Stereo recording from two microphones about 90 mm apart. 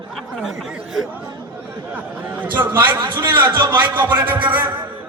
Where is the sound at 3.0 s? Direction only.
60° right (ahead or behind).